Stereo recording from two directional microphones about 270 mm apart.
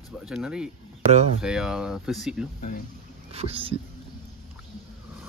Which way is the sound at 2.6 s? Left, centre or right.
Left.